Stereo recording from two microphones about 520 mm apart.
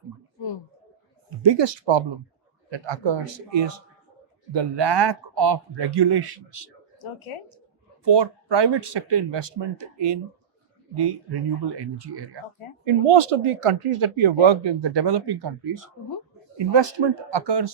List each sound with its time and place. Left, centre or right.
1.4 s speech: right
7.0 s speech: left
8.0 s speech: right
12.8 s speech: right
16.6 s speech: right